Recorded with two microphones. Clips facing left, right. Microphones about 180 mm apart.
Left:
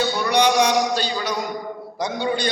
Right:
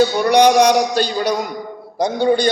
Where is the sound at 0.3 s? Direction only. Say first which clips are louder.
Right 6 dB; 40° right (ahead or behind).